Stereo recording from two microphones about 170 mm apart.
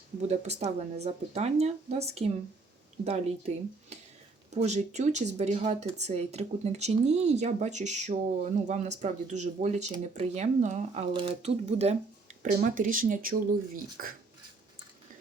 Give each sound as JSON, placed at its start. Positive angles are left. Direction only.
{"t": 0.2, "sound": "speech", "side_deg": -40}
{"t": 11.1, "sound": "speech", "side_deg": -30}
{"t": 12.4, "sound": "speech", "side_deg": -50}